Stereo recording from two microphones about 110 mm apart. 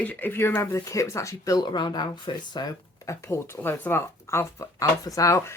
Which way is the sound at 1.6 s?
45° left (ahead or behind).